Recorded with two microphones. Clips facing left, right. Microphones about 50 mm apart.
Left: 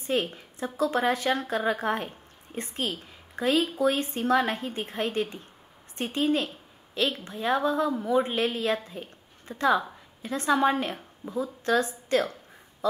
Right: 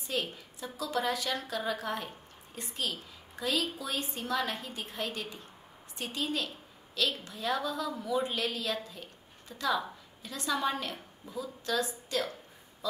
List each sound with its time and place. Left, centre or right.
0.0 s a woman's voice: left